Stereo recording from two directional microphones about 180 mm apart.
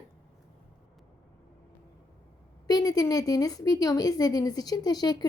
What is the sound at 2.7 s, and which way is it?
Speech, 20° left (ahead or behind).